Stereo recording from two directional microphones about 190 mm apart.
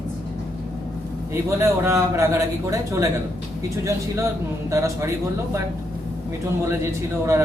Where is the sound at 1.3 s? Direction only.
15° right (ahead or behind).